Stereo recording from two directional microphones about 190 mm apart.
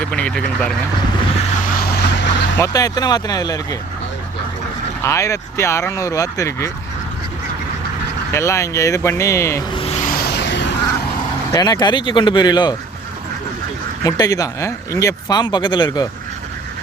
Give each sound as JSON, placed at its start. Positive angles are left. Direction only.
{"t": 0.0, "sound": "speech", "side_deg": 5}
{"t": 1.8, "sound": "vehicle", "side_deg": 65}
{"t": 2.6, "sound": "speech", "side_deg": 20}
{"t": 5.0, "sound": "speech", "side_deg": 15}
{"t": 8.3, "sound": "speech", "side_deg": 15}
{"t": 9.7, "sound": "vehicle", "side_deg": 30}
{"t": 10.1, "sound": "a sound", "side_deg": 55}
{"t": 11.5, "sound": "speech", "side_deg": 20}
{"t": 14.0, "sound": "speech", "side_deg": 20}